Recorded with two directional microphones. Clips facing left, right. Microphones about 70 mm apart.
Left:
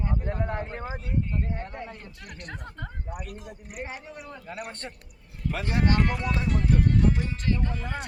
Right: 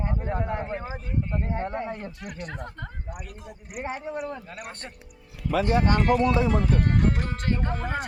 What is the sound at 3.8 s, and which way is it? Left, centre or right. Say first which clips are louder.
Speech: right 6 dB; right.